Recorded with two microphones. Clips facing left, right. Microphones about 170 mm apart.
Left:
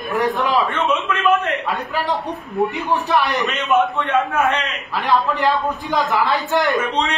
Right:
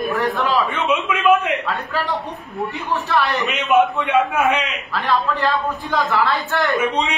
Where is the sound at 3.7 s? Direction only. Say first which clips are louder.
Right 2 dB; 10° right (ahead or behind).